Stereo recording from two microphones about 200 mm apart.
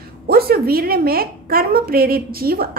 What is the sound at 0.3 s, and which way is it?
A woman's voice, 50° right (ahead or behind).